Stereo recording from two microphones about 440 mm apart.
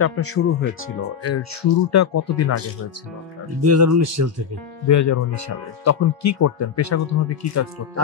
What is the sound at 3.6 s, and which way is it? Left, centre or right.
Speech, right.